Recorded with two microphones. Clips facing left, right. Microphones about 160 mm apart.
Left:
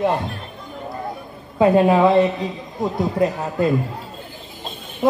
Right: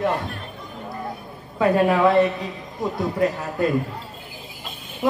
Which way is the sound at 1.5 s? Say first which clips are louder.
Left 4 dB; 20° left (ahead or behind).